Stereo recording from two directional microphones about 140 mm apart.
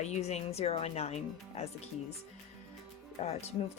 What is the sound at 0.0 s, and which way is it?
Speech, 50° left (ahead or behind).